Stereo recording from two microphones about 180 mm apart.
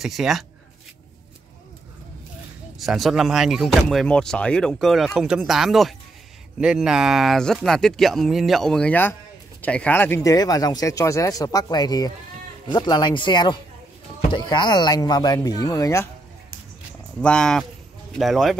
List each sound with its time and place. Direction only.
0.0 s speech: centre (ahead or behind)
2.8 s speech: centre (ahead or behind); by 16.1 s 15° left (ahead or behind)
17.2 s speech: 5° left (ahead or behind)